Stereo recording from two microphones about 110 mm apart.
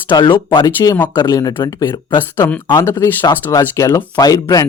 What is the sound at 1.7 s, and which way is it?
Speech, 45° left (ahead or behind).